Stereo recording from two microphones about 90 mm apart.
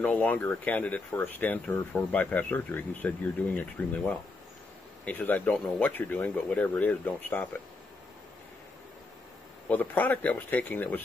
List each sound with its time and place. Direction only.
0.0 s speech: 15° left (ahead or behind)
9.7 s speech: 20° left (ahead or behind)